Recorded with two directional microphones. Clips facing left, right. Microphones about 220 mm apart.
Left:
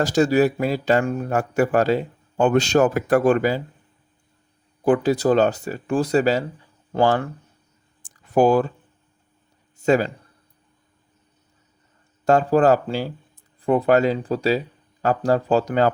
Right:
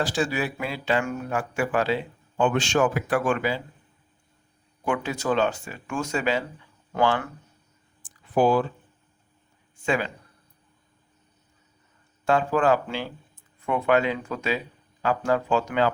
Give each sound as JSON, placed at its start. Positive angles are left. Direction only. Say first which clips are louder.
{"t": 0.0, "sound": "speech", "louder": "left 9 dB", "side_deg": 40}
{"t": 4.9, "sound": "speech", "louder": "left 8 dB", "side_deg": 35}
{"t": 8.0, "sound": "a sound", "louder": "left 4 dB", "side_deg": 45}
{"t": 9.8, "sound": "speech", "louder": "left 8 dB", "side_deg": 40}
{"t": 12.2, "sound": "speech", "louder": "left 6 dB", "side_deg": 40}